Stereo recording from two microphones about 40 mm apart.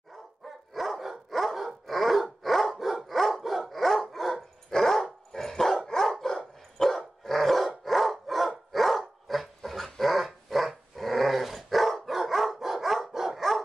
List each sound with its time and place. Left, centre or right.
0.7 s dog: centre